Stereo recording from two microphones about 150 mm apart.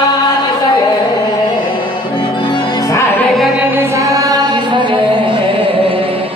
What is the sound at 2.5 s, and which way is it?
Music, 20° left (ahead or behind).